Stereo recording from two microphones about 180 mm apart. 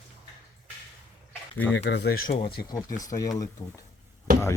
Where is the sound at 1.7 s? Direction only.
85° left; by 2.4 s 65° left (ahead or behind).